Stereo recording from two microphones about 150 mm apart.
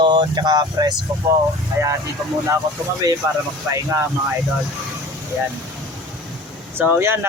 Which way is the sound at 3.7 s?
20° right (ahead or behind).